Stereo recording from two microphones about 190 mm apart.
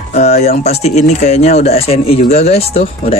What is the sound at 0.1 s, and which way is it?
Speech, 35° left (ahead or behind).